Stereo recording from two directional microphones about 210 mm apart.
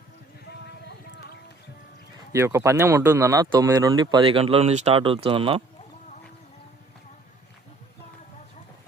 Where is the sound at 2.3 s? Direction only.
15° right (ahead or behind).